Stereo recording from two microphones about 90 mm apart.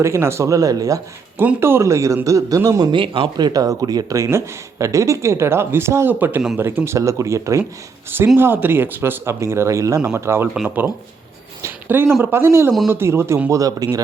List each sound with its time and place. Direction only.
0.0 s speech: 30° right (ahead or behind)
1.4 s speech: 25° right (ahead or behind)
2.9 s speech: 70° right (ahead or behind); by 6.4 s 20° right (ahead or behind)
6.8 s speech: 35° right (ahead or behind)
8.4 s speech: 25° right (ahead or behind)
11.9 s speech: 25° right (ahead or behind)
13.5 s speech: 40° right (ahead or behind)